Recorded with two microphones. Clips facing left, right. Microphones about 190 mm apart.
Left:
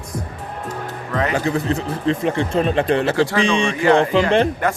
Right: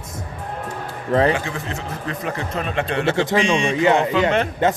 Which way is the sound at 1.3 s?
35° left (ahead or behind).